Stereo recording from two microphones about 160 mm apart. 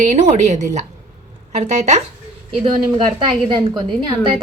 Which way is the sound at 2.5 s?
35° right (ahead or behind).